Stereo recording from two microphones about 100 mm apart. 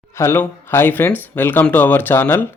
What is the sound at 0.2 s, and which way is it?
Speech, 25° left (ahead or behind).